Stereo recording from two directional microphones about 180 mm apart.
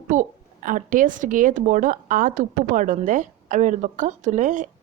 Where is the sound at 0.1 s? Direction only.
45° right (ahead or behind).